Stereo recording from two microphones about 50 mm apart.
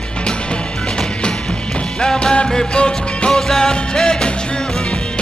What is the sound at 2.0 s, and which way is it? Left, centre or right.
Music, centre.